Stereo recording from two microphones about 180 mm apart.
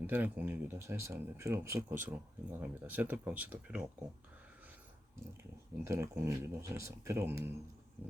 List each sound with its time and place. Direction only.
0.1 s speech: 10° right (ahead or behind)
5.4 s speech: 15° right (ahead or behind)